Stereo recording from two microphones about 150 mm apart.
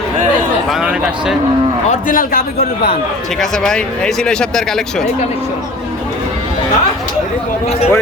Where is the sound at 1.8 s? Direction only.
65° left (ahead or behind).